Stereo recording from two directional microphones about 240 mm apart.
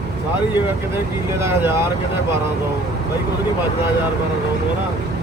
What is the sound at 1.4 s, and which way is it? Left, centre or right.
Speech, centre.